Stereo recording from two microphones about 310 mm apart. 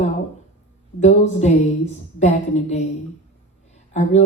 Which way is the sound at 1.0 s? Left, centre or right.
Left.